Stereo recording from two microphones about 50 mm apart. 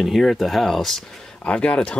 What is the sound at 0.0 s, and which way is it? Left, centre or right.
Speech, centre.